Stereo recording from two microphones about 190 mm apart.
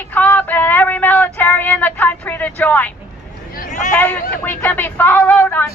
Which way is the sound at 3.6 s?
40° left (ahead or behind).